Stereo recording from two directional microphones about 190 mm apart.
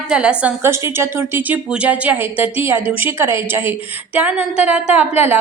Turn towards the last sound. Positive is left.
turn(degrees=-10)  # may be behind; listen again after turning